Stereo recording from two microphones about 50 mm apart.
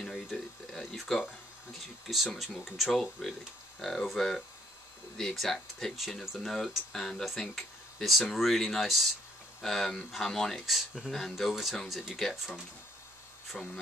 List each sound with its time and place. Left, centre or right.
0.0 s a sound: centre
2.3 s speech: centre
13.5 s speech: centre